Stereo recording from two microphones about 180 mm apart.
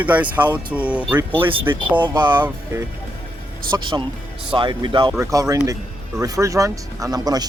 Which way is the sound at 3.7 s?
25° right (ahead or behind).